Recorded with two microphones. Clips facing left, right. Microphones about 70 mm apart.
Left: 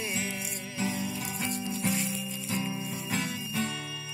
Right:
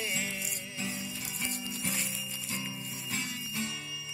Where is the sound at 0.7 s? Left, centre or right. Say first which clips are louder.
Left 7 dB; left.